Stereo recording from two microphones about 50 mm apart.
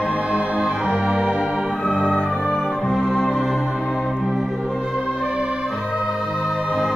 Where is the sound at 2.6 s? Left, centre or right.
Centre.